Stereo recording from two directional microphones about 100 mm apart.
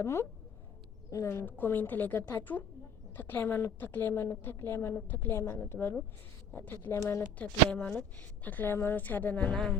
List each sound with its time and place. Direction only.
0.0 s a woman's voice: 30° left (ahead or behind)